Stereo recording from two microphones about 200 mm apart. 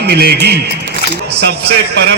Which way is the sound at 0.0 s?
55° right (ahead or behind).